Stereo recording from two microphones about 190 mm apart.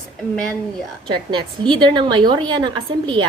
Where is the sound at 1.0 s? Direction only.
25° right (ahead or behind).